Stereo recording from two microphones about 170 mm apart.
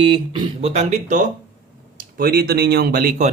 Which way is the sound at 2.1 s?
60° right (ahead or behind).